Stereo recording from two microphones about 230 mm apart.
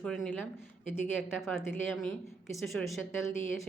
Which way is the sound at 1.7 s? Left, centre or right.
Centre.